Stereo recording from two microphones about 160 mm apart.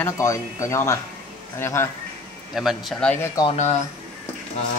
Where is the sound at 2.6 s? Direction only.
Centre (ahead or behind).